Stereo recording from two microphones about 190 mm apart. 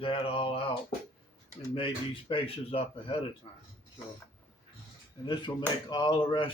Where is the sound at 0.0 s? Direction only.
30° left (ahead or behind).